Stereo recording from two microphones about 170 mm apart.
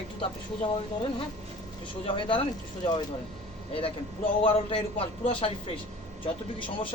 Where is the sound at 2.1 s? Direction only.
30° left (ahead or behind).